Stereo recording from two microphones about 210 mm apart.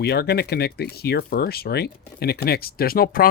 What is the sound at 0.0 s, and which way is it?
Speech, 50° left (ahead or behind).